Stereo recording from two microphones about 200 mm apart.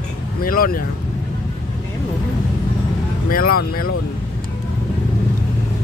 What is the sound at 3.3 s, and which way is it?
Speech, 45° left (ahead or behind).